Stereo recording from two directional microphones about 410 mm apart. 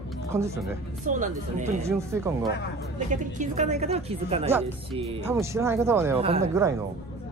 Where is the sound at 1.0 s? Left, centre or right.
Centre.